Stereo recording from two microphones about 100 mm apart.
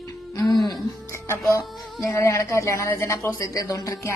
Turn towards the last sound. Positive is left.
turn(degrees=35)  # may be behind; listen again after turning